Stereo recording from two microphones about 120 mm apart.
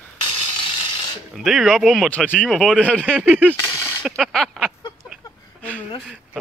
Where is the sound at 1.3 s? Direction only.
Centre (ahead or behind).